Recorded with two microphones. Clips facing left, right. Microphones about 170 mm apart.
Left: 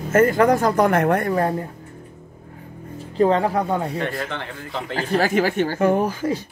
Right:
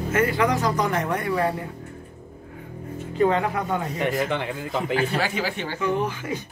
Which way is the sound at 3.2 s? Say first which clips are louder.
Left 4 dB; 35° left (ahead or behind).